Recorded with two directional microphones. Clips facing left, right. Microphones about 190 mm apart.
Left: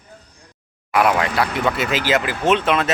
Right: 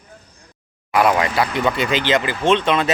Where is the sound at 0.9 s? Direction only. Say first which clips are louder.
Right 1 dB; centre (ahead or behind).